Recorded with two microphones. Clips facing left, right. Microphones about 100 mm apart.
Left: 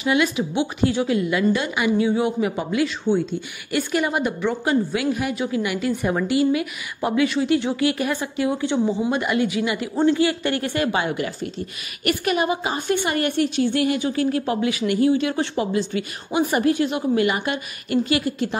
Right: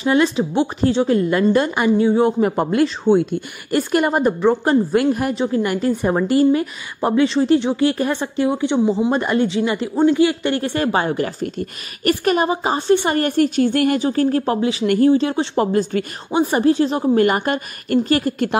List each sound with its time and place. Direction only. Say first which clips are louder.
0.0 s speech: right 4 dB; 35° right (ahead or behind)
2.5 s a woman's voice: right 5 dB; 50° right (ahead or behind); by 8.9 s 20° right (ahead or behind)
9.1 s speech: right 4 dB; 35° right (ahead or behind)
9.9 s speech: right 4 dB; 15° right (ahead or behind); by 14.9 s 30° right (ahead or behind)
14.9 s speech: right 5 dB; 45° right (ahead or behind)
16.3 s speech: right 3 dB; 30° right (ahead or behind)